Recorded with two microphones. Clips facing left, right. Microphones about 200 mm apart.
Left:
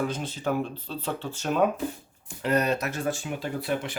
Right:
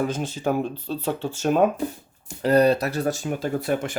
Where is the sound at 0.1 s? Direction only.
45° right (ahead or behind).